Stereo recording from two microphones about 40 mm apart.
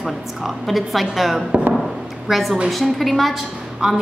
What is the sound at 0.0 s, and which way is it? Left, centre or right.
A woman's voice, centre.